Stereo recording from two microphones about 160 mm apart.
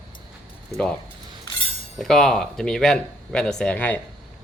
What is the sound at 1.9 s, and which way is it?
Speech, centre (ahead or behind).